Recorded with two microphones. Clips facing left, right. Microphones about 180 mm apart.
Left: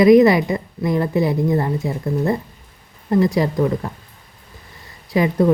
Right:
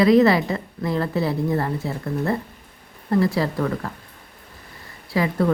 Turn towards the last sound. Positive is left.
turn(degrees=20)  # may be behind; listen again after turning